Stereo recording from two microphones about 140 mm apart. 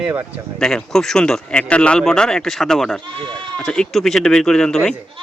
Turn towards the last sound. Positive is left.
turn(degrees=5)  # may be behind; listen again after turning